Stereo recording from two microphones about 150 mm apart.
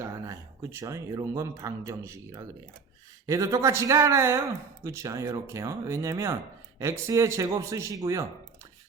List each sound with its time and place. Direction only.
0.0 s speech: 20° right (ahead or behind)